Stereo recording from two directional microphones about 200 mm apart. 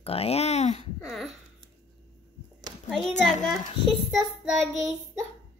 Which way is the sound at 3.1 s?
35° left (ahead or behind).